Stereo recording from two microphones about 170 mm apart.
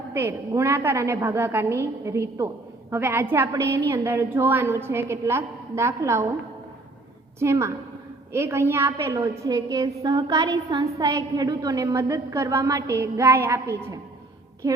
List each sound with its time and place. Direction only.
0.1 s a woman's voice: 15° right (ahead or behind)
7.3 s a woman's voice: 15° right (ahead or behind)